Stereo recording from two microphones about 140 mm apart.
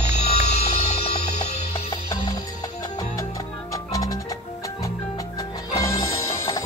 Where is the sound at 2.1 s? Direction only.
25° left (ahead or behind).